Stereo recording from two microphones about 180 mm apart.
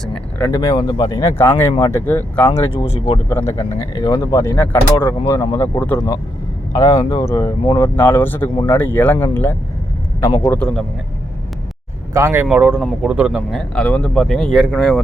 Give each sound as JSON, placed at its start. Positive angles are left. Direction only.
{"t": 0.0, "sound": "speech", "side_deg": 5}
{"t": 5.2, "sound": "speech", "side_deg": 20}
{"t": 12.1, "sound": "speech", "side_deg": -15}